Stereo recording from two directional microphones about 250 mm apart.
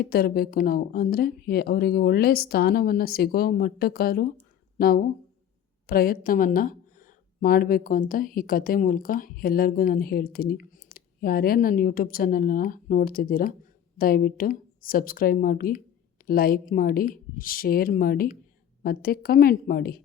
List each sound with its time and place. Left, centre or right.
0.0 s a woman's voice: left